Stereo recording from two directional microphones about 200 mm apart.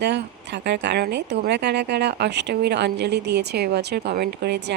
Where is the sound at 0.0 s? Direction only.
60° right (ahead or behind).